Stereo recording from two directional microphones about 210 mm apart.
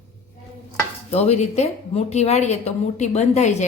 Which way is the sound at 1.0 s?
30° left (ahead or behind).